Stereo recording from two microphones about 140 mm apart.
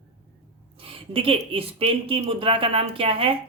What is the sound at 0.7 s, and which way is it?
A woman's voice, 40° right (ahead or behind).